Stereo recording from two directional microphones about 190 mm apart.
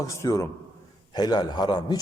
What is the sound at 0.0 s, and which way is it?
A man's voice, 15° left (ahead or behind).